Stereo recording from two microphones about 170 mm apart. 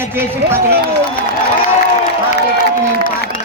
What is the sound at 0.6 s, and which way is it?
Speech, 70° right (ahead or behind).